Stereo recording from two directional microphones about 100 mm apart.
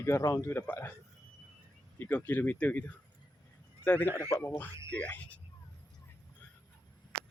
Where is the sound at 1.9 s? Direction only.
25° left (ahead or behind).